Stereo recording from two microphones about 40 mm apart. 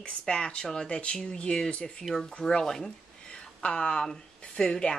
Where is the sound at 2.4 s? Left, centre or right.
Centre.